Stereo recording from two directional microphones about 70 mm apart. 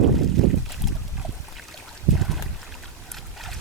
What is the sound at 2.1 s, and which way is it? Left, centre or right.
Boat, centre.